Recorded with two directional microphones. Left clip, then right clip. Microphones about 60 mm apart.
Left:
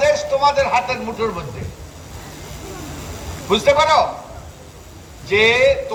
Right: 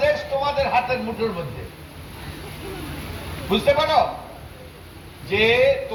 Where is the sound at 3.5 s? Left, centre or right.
Left.